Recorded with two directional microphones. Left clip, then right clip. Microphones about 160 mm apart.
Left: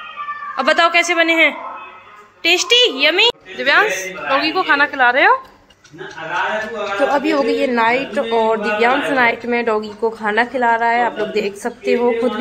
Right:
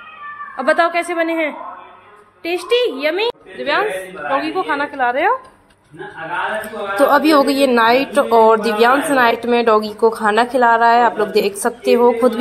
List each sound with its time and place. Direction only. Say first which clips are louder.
0.6 s a woman's voice: left 2 dB; 10° right (ahead or behind)
7.0 s a woman's voice: right 5 dB; 25° right (ahead or behind)